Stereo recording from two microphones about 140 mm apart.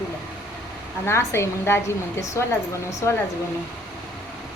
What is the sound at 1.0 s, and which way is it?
Speech, 20° left (ahead or behind).